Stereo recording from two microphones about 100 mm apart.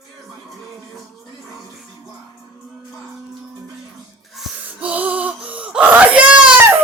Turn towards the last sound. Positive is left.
turn(degrees=-15)  # may be behind; listen again after turning